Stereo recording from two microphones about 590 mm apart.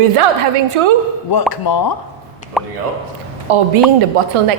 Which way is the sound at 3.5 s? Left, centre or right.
Right.